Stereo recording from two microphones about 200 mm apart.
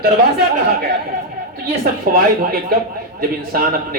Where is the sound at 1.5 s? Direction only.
45° right (ahead or behind).